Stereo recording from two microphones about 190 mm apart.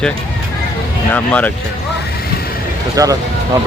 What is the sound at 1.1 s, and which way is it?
Speech, 5° left (ahead or behind).